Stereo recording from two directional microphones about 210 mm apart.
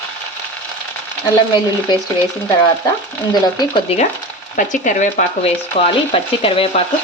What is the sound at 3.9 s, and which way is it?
Speech, 30° left (ahead or behind).